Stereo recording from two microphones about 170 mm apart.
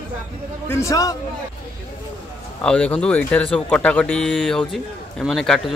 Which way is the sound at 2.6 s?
5° left (ahead or behind).